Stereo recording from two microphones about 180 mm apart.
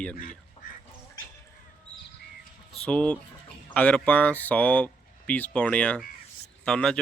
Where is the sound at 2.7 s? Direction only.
5° left (ahead or behind).